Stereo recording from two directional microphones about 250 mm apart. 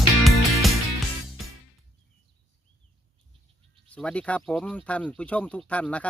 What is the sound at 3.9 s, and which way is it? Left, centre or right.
Speech, centre.